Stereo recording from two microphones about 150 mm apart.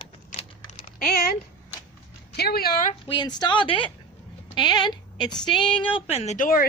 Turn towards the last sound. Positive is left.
turn(degrees=65)  # may be behind; listen again after turning